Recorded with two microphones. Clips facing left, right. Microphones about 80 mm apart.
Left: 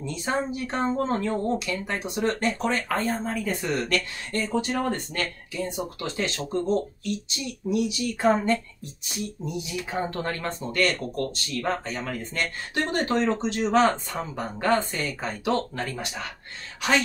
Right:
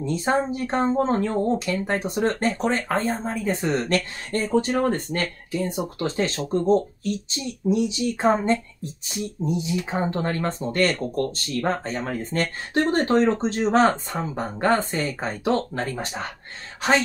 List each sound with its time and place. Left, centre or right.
0.0 s speech: right